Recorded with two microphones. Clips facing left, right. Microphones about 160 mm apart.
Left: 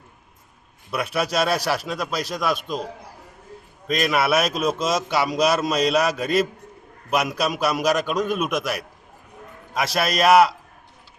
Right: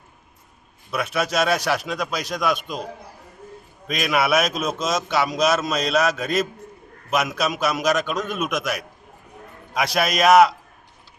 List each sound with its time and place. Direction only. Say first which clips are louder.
1.1 s a man's voice: right 1 dB; 10° left (ahead or behind)
3.8 s a man's voice: left 1 dB; centre (ahead or behind)
5.4 s a man's voice: left 1 dB; 35° left (ahead or behind)
5.6 s a man's voice: left 1 dB; 10° left (ahead or behind)